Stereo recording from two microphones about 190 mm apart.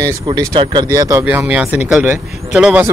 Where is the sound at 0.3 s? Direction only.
20° right (ahead or behind).